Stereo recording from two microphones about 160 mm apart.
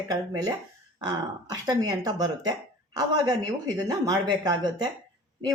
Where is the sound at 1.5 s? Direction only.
25° right (ahead or behind).